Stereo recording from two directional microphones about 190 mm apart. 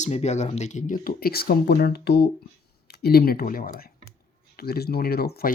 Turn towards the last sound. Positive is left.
turn(degrees=55)  # may be behind; listen again after turning